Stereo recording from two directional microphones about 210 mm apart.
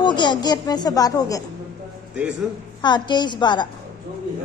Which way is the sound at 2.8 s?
20° left (ahead or behind).